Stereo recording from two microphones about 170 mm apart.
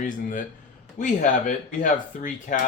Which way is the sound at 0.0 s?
50° left (ahead or behind).